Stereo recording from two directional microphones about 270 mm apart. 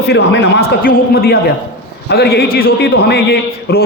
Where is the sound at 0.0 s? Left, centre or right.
Left.